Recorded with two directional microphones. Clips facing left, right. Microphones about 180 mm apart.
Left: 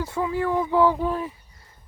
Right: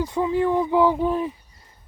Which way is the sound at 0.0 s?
20° right (ahead or behind).